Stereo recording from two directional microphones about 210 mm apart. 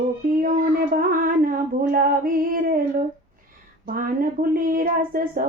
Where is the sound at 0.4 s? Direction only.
40° right (ahead or behind).